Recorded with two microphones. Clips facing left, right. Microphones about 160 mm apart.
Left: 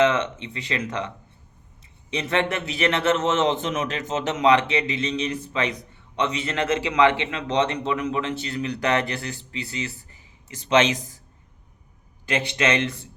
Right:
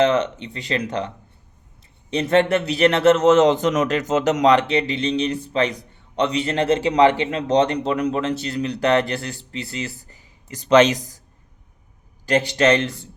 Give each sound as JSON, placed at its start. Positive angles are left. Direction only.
{"t": 0.0, "sound": "a man's voice", "side_deg": -35}
{"t": 12.5, "sound": "a man's voice", "side_deg": -35}